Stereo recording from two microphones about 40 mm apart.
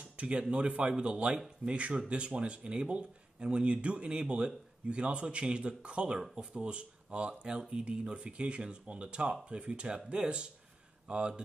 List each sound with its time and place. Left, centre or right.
0.0 s speech: right